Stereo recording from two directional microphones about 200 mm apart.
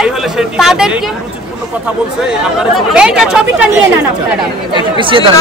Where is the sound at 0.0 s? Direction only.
Centre (ahead or behind).